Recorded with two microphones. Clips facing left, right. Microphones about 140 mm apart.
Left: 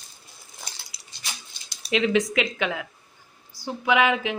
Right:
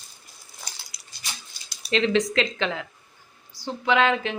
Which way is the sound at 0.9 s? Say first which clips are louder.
Left 1 dB; 30° left (ahead or behind).